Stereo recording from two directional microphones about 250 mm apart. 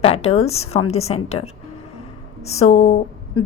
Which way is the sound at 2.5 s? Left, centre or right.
Left.